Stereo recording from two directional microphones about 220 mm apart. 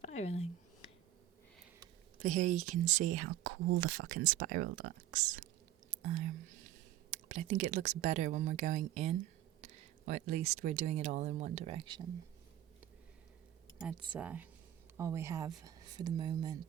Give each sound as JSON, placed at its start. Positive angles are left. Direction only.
{"t": 0.0, "sound": "a sound", "side_deg": 30}
{"t": 2.2, "sound": "speech", "side_deg": -35}
{"t": 14.2, "sound": "speech", "side_deg": -5}